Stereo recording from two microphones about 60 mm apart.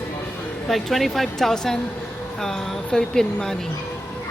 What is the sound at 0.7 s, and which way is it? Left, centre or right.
Speech, centre.